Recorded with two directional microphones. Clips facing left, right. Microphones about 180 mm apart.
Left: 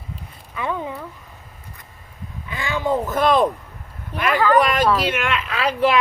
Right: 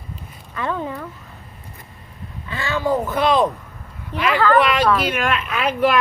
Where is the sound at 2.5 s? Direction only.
15° left (ahead or behind).